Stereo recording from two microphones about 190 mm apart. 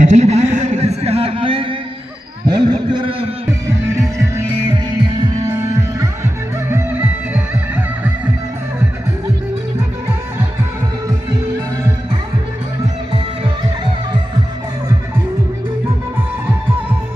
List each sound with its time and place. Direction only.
0.0 s music: 40° right (ahead or behind)
2.4 s a sound: 20° right (ahead or behind)
3.6 s music: 15° right (ahead or behind)
5.9 s music: 15° right (ahead or behind)